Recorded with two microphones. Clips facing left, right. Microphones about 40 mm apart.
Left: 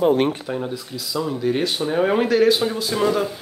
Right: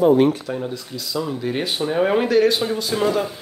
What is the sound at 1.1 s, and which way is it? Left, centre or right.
Speech, centre.